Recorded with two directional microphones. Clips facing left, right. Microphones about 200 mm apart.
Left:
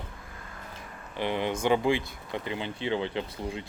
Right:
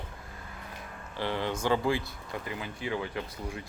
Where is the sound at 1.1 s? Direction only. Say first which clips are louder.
Left 3 dB; 20° left (ahead or behind).